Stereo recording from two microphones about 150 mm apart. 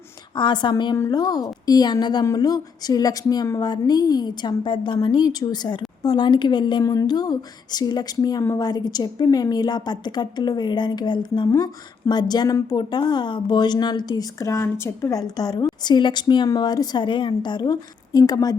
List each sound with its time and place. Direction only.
0.3 s a woman's voice: 30° left (ahead or behind)